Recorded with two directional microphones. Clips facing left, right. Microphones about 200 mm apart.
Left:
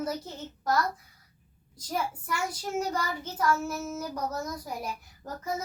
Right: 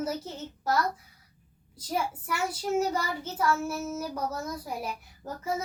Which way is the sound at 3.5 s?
25° right (ahead or behind).